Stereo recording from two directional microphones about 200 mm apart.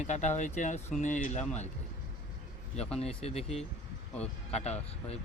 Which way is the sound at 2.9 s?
30° left (ahead or behind).